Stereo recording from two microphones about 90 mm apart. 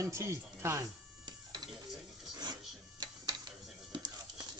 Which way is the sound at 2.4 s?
50° right (ahead or behind).